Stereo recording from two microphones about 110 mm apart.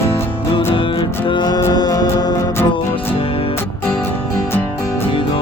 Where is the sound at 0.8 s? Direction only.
50° left (ahead or behind).